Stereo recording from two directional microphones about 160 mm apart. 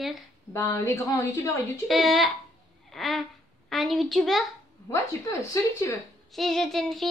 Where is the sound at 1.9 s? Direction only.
Centre (ahead or behind).